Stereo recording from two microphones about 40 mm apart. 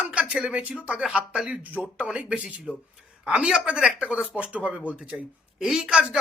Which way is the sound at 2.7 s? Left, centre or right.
Left.